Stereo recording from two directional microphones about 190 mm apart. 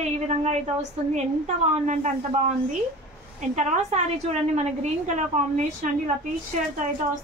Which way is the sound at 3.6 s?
40° right (ahead or behind).